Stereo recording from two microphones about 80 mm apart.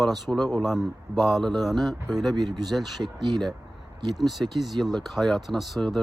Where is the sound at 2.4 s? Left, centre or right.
Right.